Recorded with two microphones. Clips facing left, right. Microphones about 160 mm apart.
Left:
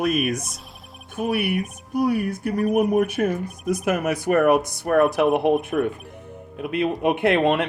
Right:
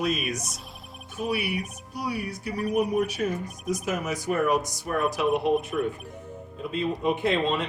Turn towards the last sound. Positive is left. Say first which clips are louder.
# left 6 dB
turn(degrees=65)  # may be behind; listen again after turning